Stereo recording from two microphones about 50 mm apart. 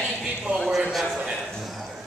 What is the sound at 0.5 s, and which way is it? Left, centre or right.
Speech, centre.